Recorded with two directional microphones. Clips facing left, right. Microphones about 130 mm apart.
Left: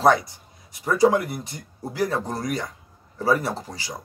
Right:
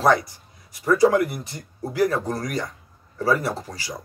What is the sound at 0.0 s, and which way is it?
Speech, 20° left (ahead or behind).